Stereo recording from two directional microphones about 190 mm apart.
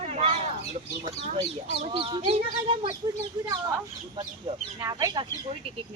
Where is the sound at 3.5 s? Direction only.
15° right (ahead or behind).